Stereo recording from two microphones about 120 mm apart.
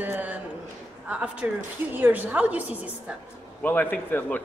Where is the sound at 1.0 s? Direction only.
10° right (ahead or behind).